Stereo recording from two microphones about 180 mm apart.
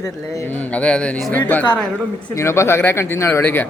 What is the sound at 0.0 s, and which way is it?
A man's voice, 15° left (ahead or behind).